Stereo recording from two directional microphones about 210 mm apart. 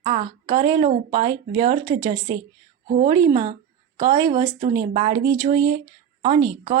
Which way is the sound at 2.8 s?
40° right (ahead or behind).